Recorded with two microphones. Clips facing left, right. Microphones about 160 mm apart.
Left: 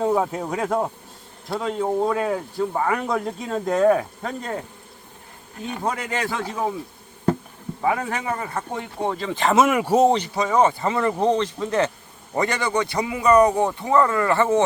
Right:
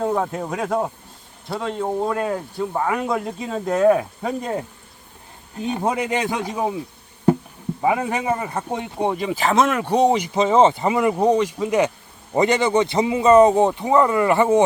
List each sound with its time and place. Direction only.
0.0 s speech: 5° left (ahead or behind); by 4.6 s 15° right (ahead or behind)
5.6 s speech: 20° right (ahead or behind)
7.8 s a man's voice: 15° right (ahead or behind)
9.4 s speech: 5° left (ahead or behind)
10.2 s a man's voice: 20° right (ahead or behind)